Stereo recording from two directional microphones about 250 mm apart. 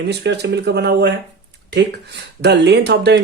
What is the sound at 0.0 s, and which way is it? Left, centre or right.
Speech, right.